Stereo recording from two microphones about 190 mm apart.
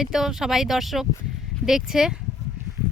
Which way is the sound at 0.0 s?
Centre (ahead or behind).